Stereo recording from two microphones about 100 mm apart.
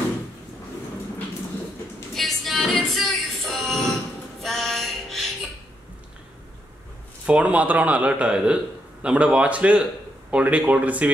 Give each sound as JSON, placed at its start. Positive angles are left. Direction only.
{"t": 2.1, "sound": "music", "side_deg": 0}
{"t": 7.2, "sound": "speech", "side_deg": -15}